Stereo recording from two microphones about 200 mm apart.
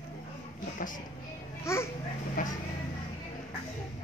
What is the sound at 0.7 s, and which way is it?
Music, 40° left (ahead or behind).